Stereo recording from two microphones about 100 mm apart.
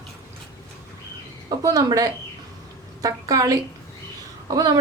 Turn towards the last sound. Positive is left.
turn(degrees=-35)  # may be behind; listen again after turning